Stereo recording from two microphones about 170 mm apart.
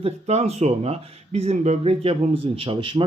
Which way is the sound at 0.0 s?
40° right (ahead or behind).